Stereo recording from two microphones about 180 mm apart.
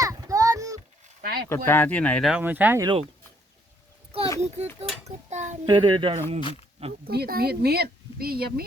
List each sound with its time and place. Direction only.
0.0 s a sound: 20° right (ahead or behind)
1.0 s a sound: 55° right (ahead or behind)
1.5 s speech: 10° left (ahead or behind)
2.3 s speech: 10° right (ahead or behind)
2.8 s speech: 30° right (ahead or behind)
4.4 s speech: 35° right (ahead or behind)
5.6 s speech: 25° right (ahead or behind)
6.4 s speech: 30° left (ahead or behind)
7.0 s speech: 60° right (ahead or behind)